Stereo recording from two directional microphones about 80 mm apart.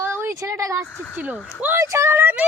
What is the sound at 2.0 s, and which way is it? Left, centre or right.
Speech, right.